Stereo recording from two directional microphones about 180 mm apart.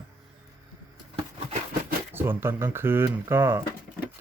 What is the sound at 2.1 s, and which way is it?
A man's voice, 10° right (ahead or behind).